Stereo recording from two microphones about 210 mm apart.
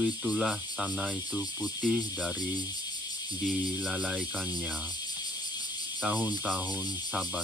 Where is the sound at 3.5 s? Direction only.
5° right (ahead or behind).